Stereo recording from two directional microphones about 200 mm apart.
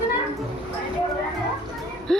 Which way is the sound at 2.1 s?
5° left (ahead or behind).